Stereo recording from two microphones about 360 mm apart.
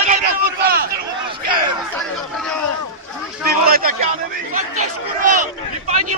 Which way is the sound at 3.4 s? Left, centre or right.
Right.